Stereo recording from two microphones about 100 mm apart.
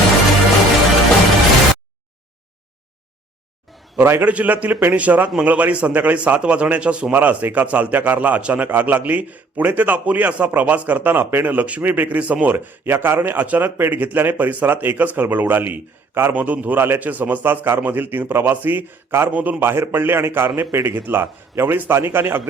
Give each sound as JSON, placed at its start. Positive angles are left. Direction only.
{"t": 3.9, "sound": "a man's voice", "side_deg": -20}